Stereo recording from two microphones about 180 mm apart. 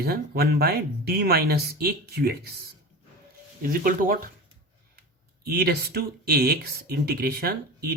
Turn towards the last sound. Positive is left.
turn(degrees=-60)  # may be behind; listen again after turning